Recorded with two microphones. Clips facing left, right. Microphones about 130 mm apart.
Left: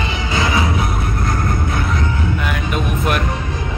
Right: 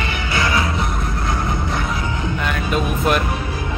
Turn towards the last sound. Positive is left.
turn(degrees=5)  # may be behind; listen again after turning